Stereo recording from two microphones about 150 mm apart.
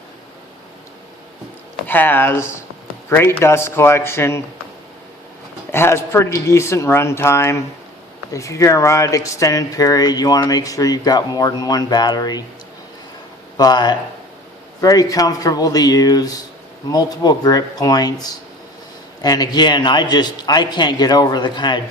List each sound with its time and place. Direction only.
1.9 s speech: 15° left (ahead or behind)
5.7 s speech: 15° left (ahead or behind)
13.6 s speech: 30° left (ahead or behind)